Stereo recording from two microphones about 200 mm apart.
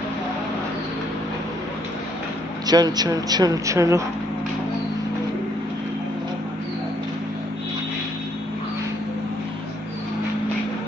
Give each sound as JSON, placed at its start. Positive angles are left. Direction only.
{"t": 2.6, "sound": "speech", "side_deg": -20}